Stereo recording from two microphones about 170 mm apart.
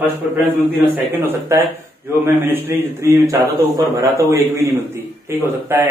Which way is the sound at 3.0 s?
20° right (ahead or behind).